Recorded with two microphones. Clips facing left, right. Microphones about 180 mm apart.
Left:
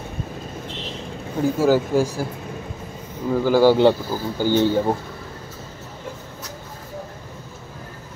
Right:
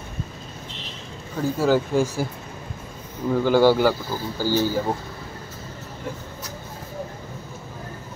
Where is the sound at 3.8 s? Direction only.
20° left (ahead or behind).